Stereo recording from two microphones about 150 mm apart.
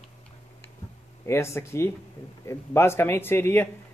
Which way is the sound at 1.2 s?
15° left (ahead or behind).